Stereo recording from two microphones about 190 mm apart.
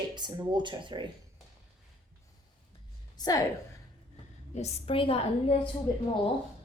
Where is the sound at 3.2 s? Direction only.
20° left (ahead or behind).